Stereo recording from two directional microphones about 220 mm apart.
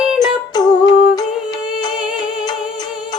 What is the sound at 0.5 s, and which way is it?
Humming, 20° left (ahead or behind).